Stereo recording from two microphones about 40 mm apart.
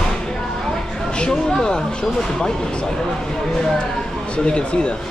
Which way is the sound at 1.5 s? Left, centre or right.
Centre.